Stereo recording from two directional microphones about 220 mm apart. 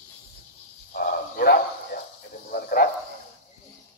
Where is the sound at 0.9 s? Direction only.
40° left (ahead or behind).